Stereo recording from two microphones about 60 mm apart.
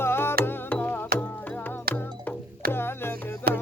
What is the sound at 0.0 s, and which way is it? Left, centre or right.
Music, left.